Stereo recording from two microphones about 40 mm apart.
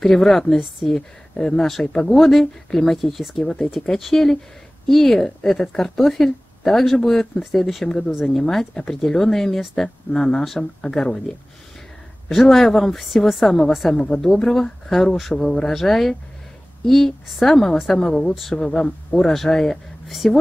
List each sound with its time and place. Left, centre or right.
0.0 s speech: centre
0.8 s speech: left
1.6 s a woman's voice: centre
18.6 s speech: centre